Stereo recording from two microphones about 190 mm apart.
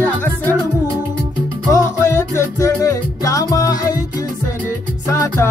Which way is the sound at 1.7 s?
15° left (ahead or behind).